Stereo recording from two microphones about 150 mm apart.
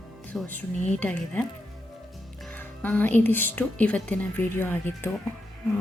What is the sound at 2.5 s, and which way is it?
Speech, 10° left (ahead or behind).